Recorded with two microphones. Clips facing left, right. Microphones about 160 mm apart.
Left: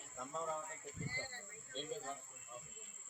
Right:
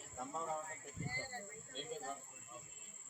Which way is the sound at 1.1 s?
40° right (ahead or behind).